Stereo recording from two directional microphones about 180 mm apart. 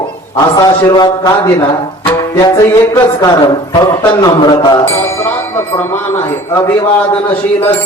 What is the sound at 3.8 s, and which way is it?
Music, 20° left (ahead or behind).